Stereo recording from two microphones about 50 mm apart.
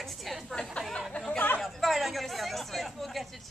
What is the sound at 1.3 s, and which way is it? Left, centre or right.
Chatter, left.